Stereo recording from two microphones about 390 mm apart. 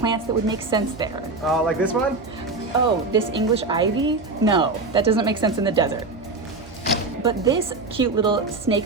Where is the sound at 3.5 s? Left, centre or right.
Centre.